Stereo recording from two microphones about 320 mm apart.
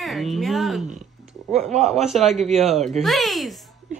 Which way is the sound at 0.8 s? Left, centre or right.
Right.